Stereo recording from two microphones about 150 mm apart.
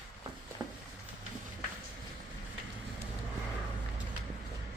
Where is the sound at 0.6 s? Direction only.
5° right (ahead or behind).